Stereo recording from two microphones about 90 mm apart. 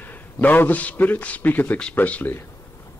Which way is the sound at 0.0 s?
20° left (ahead or behind).